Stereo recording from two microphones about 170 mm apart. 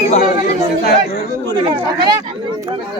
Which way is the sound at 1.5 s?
30° right (ahead or behind).